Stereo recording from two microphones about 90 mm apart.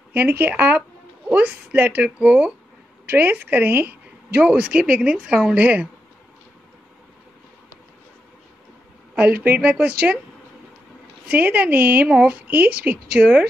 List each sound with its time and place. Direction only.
0.1 s a woman's voice: 20° right (ahead or behind)
9.1 s a woman's voice: 20° right (ahead or behind)
11.2 s a woman's voice: 20° right (ahead or behind)